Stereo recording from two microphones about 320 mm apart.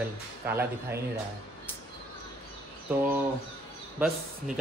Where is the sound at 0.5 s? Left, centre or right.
Centre.